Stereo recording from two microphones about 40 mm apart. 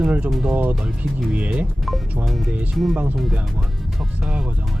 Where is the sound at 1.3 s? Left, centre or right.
Right.